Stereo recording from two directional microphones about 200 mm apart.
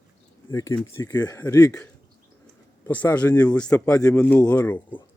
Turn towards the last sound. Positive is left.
turn(degrees=10)  # may be behind; listen again after turning